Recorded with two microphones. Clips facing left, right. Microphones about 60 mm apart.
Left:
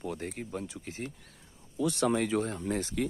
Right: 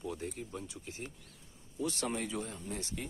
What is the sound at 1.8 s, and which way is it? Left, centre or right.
Speech, left.